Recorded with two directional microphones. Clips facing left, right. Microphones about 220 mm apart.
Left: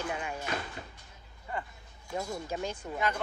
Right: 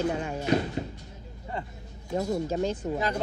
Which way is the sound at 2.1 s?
40° right (ahead or behind).